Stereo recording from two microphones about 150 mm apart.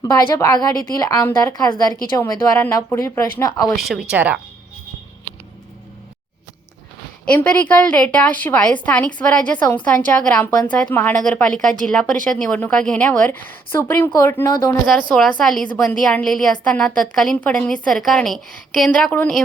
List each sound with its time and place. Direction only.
0.0 s speech: 20° left (ahead or behind)
3.8 s a woman's voice: centre (ahead or behind)
4.1 s speech: 10° right (ahead or behind)
7.3 s speech: 10° left (ahead or behind)
15.1 s a woman's voice: 5° left (ahead or behind)